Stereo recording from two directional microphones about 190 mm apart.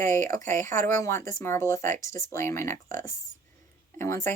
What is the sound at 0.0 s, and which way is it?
Speech, 15° left (ahead or behind).